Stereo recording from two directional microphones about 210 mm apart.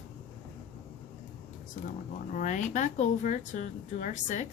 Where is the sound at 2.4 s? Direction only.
35° left (ahead or behind).